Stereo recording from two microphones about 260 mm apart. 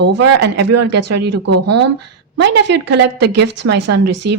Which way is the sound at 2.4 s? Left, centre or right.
Right.